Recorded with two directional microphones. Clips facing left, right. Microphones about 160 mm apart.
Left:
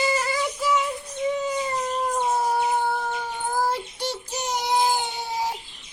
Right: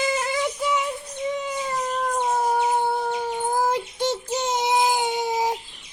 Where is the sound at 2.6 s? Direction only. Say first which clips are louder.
Right 2 dB; 15° right (ahead or behind).